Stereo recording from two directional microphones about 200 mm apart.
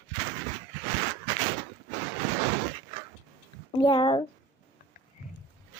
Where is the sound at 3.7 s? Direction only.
25° left (ahead or behind).